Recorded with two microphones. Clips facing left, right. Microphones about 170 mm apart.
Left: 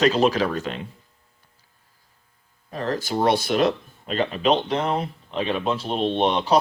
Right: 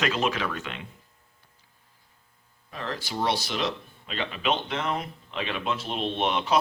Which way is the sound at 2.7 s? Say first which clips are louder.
Left 8 dB; 40° left (ahead or behind).